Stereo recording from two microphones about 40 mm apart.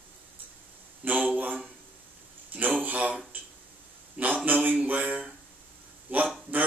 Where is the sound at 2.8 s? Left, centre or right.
Right.